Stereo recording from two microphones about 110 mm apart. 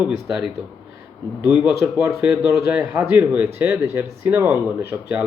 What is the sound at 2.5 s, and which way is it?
Speech, 25° right (ahead or behind).